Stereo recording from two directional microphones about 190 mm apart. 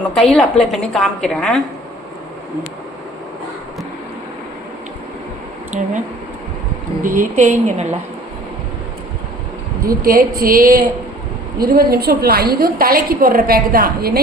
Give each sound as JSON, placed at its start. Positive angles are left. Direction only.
{"t": 0.2, "sound": "a woman's voice", "side_deg": 5}
{"t": 7.0, "sound": "a woman's voice", "side_deg": -45}
{"t": 9.8, "sound": "a woman's voice", "side_deg": -50}